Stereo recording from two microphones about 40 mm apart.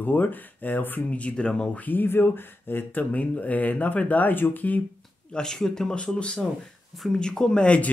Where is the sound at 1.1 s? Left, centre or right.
Left.